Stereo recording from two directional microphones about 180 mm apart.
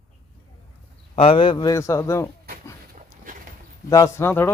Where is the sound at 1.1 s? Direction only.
30° left (ahead or behind); by 2.3 s 15° left (ahead or behind).